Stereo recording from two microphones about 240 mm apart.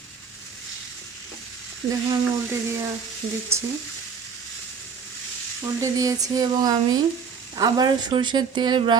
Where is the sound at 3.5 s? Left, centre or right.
Centre.